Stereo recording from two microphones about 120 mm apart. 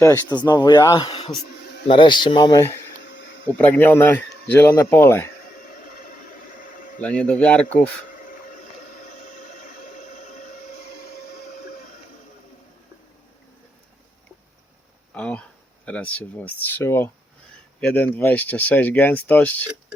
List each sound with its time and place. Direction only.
0.3 s speech: 35° left (ahead or behind)
1.0 s speech: 50° left (ahead or behind)
3.6 s speech: 15° left (ahead or behind)
7.0 s speech: 10° left (ahead or behind)
15.1 s speech: 10° left (ahead or behind)